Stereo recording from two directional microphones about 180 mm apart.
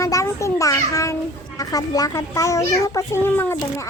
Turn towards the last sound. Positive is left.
turn(degrees=15)  # may be behind; listen again after turning